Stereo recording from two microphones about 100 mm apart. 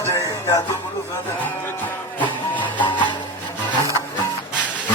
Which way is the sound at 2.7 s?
50° left (ahead or behind).